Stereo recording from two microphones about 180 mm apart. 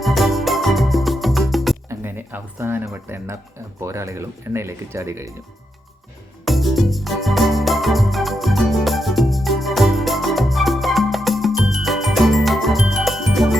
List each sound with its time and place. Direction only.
0.0 s music: centre (ahead or behind)
1.9 s music: 10° right (ahead or behind)
3.8 s speech: 15° right (ahead or behind)
6.4 s organ: centre (ahead or behind)